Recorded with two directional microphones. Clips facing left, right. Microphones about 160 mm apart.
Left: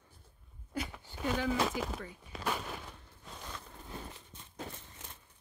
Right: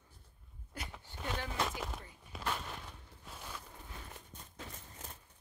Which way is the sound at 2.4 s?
5° left (ahead or behind).